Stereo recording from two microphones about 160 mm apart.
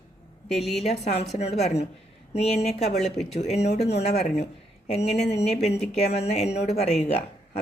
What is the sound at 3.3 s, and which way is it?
Speech, 45° left (ahead or behind).